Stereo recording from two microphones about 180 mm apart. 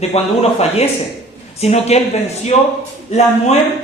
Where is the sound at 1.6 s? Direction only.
35° left (ahead or behind).